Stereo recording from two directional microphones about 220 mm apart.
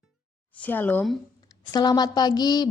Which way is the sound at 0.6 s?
10° left (ahead or behind).